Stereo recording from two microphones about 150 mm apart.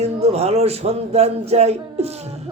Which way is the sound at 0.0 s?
45° right (ahead or behind).